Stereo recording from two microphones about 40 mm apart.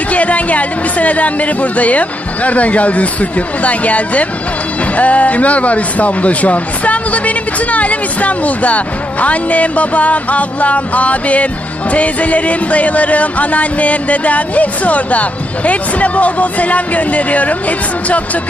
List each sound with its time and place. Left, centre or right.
0.1 s music: left